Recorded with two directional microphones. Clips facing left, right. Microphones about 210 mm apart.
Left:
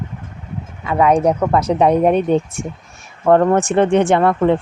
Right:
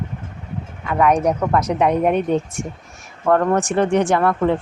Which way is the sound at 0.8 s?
25° left (ahead or behind).